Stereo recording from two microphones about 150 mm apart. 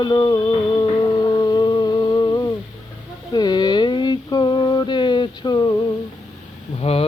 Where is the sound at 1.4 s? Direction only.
25° left (ahead or behind).